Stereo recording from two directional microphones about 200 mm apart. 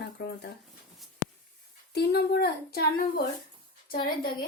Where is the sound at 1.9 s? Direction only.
55° left (ahead or behind).